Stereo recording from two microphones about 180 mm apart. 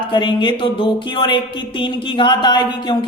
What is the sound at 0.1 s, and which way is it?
Speech, 25° left (ahead or behind).